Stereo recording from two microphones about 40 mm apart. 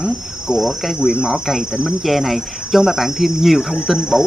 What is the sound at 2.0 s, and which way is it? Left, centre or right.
Cricket, centre.